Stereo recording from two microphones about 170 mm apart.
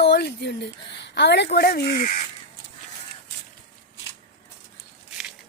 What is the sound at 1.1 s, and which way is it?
Speech, 85° left.